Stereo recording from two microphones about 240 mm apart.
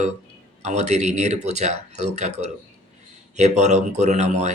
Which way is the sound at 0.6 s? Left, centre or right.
Right.